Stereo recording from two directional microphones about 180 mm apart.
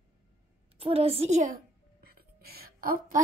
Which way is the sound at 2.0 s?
60° right (ahead or behind).